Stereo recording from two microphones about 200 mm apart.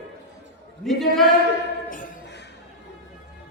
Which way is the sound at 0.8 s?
Centre (ahead or behind).